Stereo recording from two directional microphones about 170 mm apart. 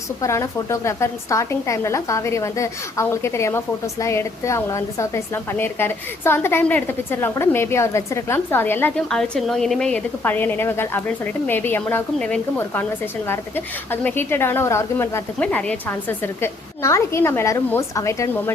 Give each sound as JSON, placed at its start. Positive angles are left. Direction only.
{"t": 0.2, "sound": "a woman's voice", "side_deg": 15}
{"t": 13.9, "sound": "a woman's voice", "side_deg": 10}